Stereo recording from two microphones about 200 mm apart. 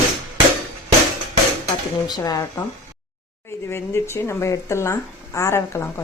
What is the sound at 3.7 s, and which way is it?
A woman's voice, 15° left (ahead or behind).